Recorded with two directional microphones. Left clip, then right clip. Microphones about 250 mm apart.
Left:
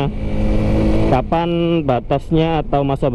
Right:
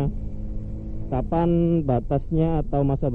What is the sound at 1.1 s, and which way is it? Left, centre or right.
A man's voice, centre.